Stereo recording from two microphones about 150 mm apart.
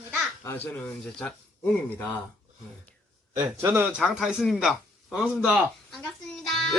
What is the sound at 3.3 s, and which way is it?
Speech, 25° right (ahead or behind).